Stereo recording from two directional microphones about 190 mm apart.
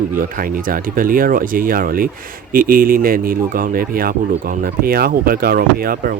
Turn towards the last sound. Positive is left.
turn(degrees=-50)  # may be behind; listen again after turning